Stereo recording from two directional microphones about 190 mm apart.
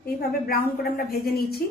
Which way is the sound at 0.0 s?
55° left (ahead or behind).